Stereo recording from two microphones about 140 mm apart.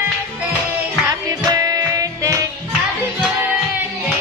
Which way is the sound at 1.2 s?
25° right (ahead or behind).